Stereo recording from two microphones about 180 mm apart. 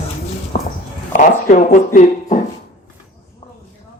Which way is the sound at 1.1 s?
45° left (ahead or behind).